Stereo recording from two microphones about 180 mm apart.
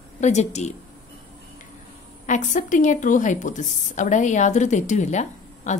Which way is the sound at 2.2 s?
45° left (ahead or behind).